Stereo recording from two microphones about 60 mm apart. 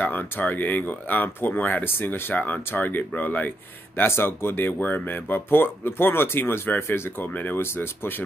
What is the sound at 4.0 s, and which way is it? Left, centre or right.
Speech, left.